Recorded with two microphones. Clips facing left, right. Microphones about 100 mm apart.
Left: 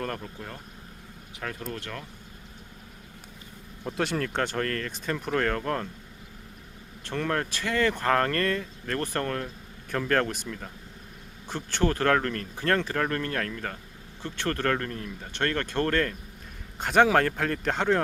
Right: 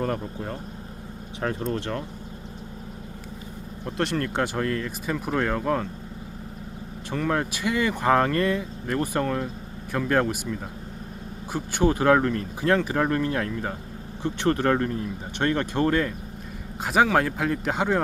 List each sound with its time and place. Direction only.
0.0 s speech: 20° right (ahead or behind)
3.8 s speech: centre (ahead or behind)
7.1 s speech: 10° right (ahead or behind)